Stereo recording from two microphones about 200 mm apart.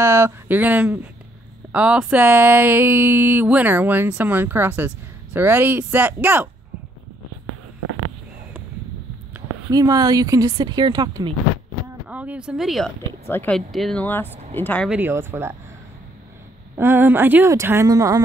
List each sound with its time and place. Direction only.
0.0 s speech: 15° right (ahead or behind)
9.3 s speech: 15° right (ahead or behind)
12.1 s speech: 5° right (ahead or behind); by 14.9 s 10° left (ahead or behind)
14.9 s speech: 10° right (ahead or behind)
16.7 s speech: 10° right (ahead or behind)